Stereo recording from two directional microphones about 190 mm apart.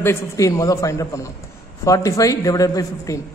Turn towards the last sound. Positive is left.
turn(degrees=15)  # may be behind; listen again after turning